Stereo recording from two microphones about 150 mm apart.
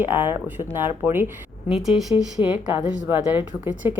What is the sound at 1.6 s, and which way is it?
A woman's voice, centre (ahead or behind).